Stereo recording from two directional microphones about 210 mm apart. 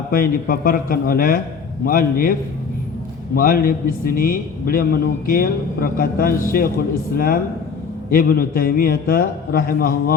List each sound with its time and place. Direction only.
0.1 s a man's voice: 40° left (ahead or behind)
3.3 s a man's voice: 45° left (ahead or behind)
8.1 s a man's voice: 45° left (ahead or behind)